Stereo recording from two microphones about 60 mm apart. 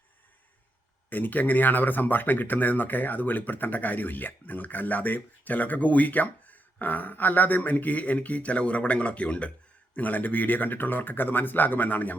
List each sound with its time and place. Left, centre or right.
1.1 s speech: left